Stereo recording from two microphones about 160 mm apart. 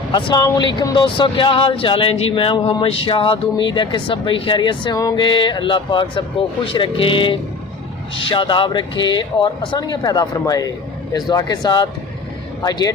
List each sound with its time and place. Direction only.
0.1 s speech: 25° left (ahead or behind)